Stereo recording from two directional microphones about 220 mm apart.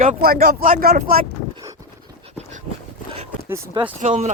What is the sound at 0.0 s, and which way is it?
Speech, 40° right (ahead or behind).